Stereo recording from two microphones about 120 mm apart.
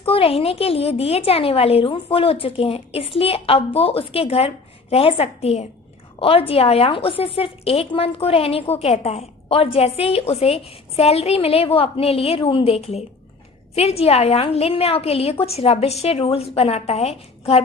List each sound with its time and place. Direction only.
0.0 s a woman's voice: 50° left (ahead or behind)